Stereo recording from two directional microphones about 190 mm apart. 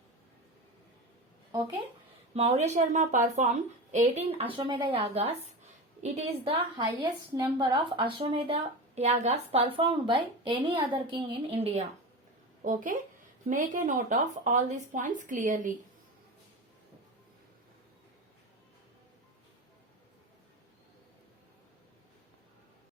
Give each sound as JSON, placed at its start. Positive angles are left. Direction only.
{"t": 2.3, "sound": "a woman's voice", "side_deg": -35}
{"t": 12.6, "sound": "speech", "side_deg": -45}